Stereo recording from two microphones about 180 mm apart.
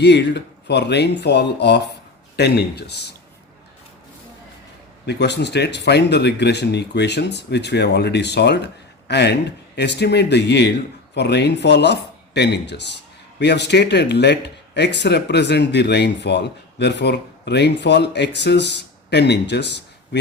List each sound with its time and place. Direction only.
0.0 s speech: 70° left (ahead or behind)
5.0 s speech: 70° left (ahead or behind)